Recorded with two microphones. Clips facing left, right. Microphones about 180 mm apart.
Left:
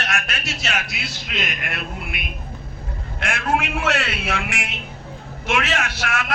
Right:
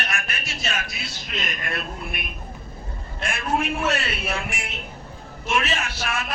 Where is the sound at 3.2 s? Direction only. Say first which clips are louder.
Left 2 dB; 85° left.